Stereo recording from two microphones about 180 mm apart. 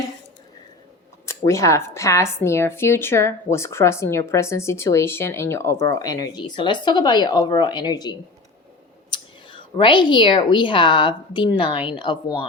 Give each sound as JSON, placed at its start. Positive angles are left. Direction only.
{"t": 1.3, "sound": "speech", "side_deg": 15}